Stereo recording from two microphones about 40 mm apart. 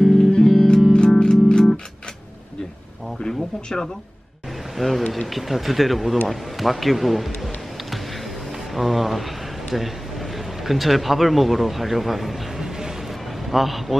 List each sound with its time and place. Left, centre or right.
0.0 s music: centre
0.9 s music: left
3.2 s a sound: centre
4.7 s speech: centre
8.7 s speech: centre
10.6 s speech: centre